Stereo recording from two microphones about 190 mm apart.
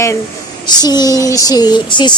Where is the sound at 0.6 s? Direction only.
20° left (ahead or behind).